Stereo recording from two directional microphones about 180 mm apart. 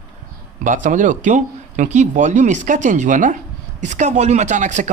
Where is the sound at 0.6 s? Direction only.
45° right (ahead or behind).